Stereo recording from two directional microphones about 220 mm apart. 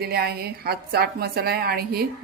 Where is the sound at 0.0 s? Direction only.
45° right (ahead or behind).